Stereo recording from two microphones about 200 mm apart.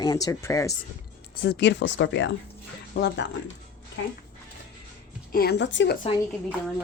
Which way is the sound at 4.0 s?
70° left (ahead or behind).